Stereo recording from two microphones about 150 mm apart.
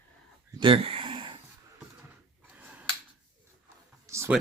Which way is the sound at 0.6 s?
35° right (ahead or behind).